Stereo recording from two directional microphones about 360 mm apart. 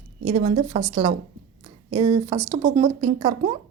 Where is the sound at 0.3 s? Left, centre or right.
Centre.